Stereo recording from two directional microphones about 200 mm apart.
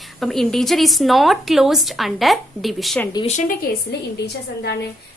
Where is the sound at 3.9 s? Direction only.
55° left (ahead or behind).